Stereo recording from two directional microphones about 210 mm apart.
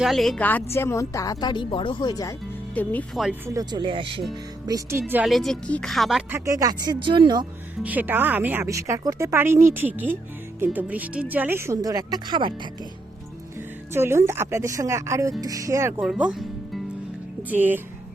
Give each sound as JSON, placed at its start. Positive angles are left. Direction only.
{"t": 0.0, "sound": "speech", "side_deg": 0}
{"t": 2.7, "sound": "speech", "side_deg": 5}
{"t": 3.5, "sound": "speech", "side_deg": -20}
{"t": 4.6, "sound": "speech", "side_deg": -15}
{"t": 6.4, "sound": "speech", "side_deg": -15}
{"t": 7.8, "sound": "speech", "side_deg": -5}
{"t": 13.9, "sound": "speech", "side_deg": -10}
{"t": 16.0, "sound": "speech", "side_deg": -5}